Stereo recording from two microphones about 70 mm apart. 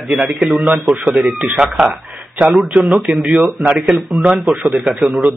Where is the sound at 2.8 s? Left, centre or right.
Centre.